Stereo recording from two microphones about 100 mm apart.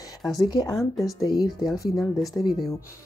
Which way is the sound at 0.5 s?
45° left (ahead or behind).